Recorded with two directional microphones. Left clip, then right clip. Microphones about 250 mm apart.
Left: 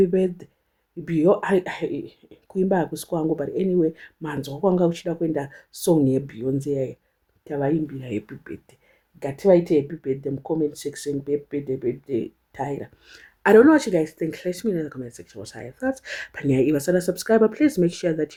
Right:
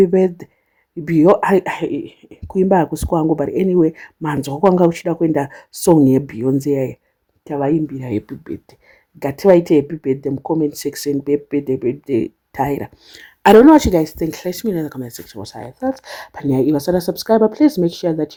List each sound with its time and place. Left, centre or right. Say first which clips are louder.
0.0 s speech: right 7 dB; right